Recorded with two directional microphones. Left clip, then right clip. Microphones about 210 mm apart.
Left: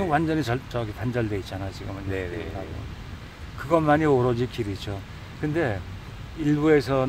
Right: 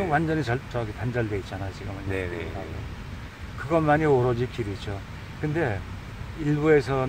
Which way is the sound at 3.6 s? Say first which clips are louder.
Left 1 dB; 50° left (ahead or behind).